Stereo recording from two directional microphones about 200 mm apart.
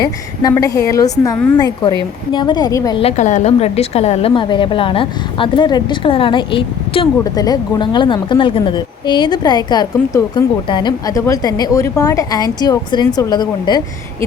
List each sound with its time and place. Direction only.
0.0 s a woman's voice: 20° left (ahead or behind)
3.0 s a woman's voice: 35° left (ahead or behind)